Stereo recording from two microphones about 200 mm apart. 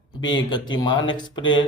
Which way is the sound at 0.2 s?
70° left (ahead or behind).